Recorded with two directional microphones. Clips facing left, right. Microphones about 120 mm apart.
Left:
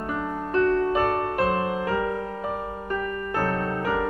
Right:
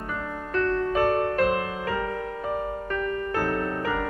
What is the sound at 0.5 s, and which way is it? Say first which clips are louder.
Music: left 3 dB; 25° left (ahead or behind).